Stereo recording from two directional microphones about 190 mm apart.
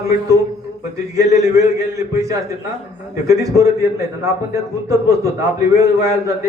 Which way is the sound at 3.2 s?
15° right (ahead or behind).